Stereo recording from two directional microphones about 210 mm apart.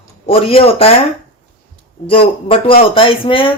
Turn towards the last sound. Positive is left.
turn(degrees=25)  # may be behind; listen again after turning